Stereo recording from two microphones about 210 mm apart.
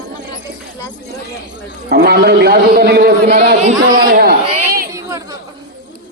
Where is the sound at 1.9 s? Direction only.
50° right (ahead or behind).